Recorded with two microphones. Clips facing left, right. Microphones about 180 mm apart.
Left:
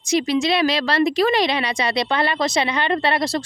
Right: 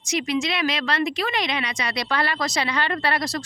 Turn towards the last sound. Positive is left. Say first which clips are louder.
# left 5 dB
turn(degrees=25)  # may be behind; listen again after turning